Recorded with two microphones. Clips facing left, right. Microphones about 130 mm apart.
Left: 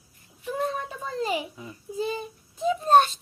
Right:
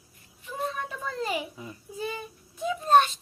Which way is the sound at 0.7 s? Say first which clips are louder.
Left 2 dB; 30° left (ahead or behind).